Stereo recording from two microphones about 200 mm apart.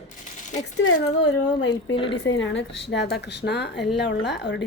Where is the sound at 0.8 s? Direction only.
65° left (ahead or behind).